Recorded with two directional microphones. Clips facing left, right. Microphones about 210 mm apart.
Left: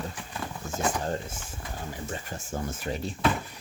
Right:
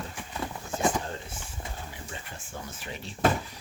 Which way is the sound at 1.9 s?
40° left (ahead or behind).